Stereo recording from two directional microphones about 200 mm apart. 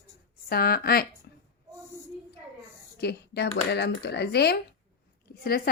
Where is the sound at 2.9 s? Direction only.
55° left (ahead or behind).